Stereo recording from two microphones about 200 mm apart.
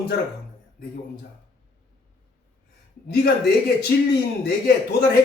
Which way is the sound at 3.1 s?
50° left (ahead or behind).